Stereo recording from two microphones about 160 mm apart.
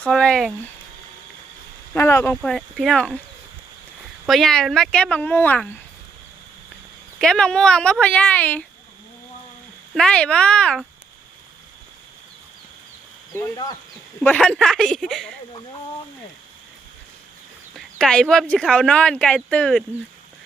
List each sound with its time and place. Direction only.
0.0 s speech: 5° left (ahead or behind)
1.9 s speech: 15° left (ahead or behind)
2.4 s speech: centre (ahead or behind)
4.3 s speech: centre (ahead or behind)
7.2 s speech: 5° left (ahead or behind)
9.9 s speech: 5° left (ahead or behind)
13.3 s speech: 15° left (ahead or behind)
17.7 s speech: 5° left (ahead or behind)